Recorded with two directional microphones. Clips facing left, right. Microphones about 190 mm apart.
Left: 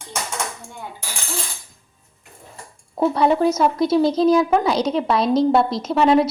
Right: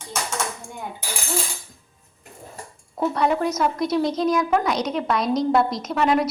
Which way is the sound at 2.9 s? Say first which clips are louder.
Left 4 dB; 30° left (ahead or behind).